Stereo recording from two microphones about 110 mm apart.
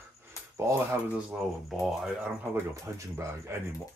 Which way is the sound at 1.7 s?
Centre (ahead or behind).